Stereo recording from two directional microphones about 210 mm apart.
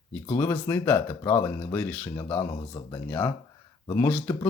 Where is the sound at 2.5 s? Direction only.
20° left (ahead or behind).